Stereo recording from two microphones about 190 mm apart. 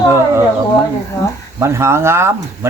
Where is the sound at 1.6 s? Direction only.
15° right (ahead or behind).